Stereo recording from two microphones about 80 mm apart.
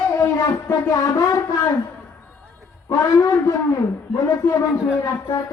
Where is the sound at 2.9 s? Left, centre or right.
Left.